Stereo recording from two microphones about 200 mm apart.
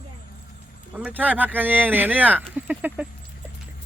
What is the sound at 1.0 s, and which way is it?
Speech, 10° right (ahead or behind).